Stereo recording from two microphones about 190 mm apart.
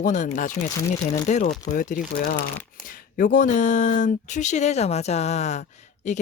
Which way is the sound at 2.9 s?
45° left (ahead or behind).